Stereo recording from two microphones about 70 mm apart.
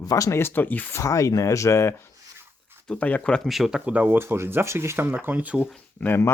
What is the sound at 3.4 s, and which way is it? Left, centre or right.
Speech, centre.